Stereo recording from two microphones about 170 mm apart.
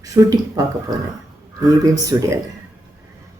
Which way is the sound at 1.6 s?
20° right (ahead or behind).